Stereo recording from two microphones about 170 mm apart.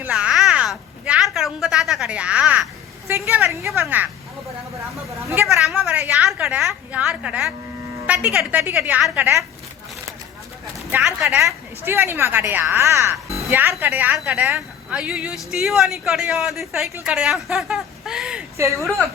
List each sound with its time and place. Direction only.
0.0 s a sound: 5° right (ahead or behind)
3.1 s a woman's voice: 15° right (ahead or behind)
5.2 s speech: 15° right (ahead or behind)
5.5 s a woman's voice: centre (ahead or behind)
10.9 s a woman's voice: 10° right (ahead or behind)